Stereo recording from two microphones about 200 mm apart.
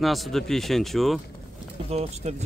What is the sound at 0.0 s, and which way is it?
A man's voice, centre (ahead or behind).